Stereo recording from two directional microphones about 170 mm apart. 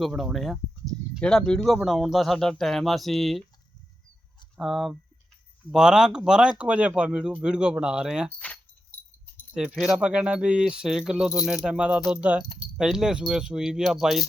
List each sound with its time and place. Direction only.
0.0 s speech: centre (ahead or behind)
4.6 s speech: centre (ahead or behind)
9.6 s speech: 5° right (ahead or behind)
12.5 s keys jangling: 25° left (ahead or behind)
12.7 s speech: 5° right (ahead or behind)